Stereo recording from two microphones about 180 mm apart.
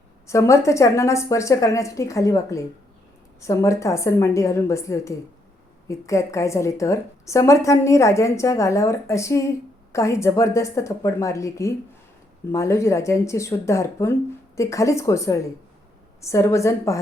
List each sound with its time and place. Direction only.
0.3 s a woman's voice: 15° left (ahead or behind)